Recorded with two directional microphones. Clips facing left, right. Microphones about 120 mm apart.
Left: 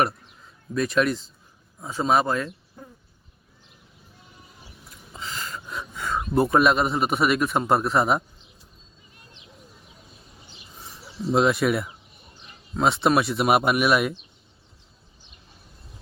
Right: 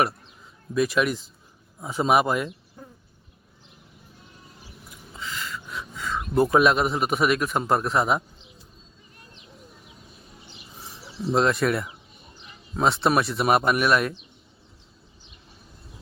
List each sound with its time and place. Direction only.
0.7 s speech: 5° right (ahead or behind)
5.2 s a sound: 35° left (ahead or behind)
6.3 s a man's voice: centre (ahead or behind)
11.3 s a man's voice: 5° left (ahead or behind)